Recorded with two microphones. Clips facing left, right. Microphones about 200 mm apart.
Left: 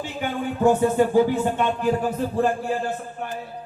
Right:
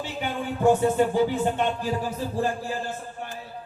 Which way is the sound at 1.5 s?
55° left (ahead or behind).